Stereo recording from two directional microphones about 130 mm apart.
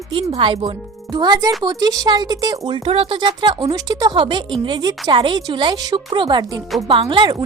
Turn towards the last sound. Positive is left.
turn(degrees=-35)  # may be behind; listen again after turning